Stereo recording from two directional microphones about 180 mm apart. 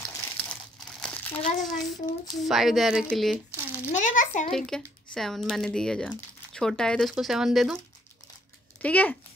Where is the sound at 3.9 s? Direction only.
45° left (ahead or behind).